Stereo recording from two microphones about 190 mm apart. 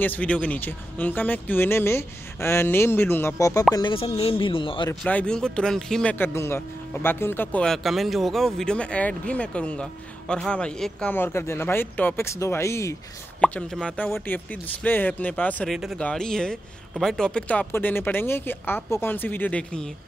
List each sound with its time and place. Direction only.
0.0 s speech: 10° left (ahead or behind); by 4.9 s 25° left (ahead or behind)
5.0 s speech: 5° left (ahead or behind)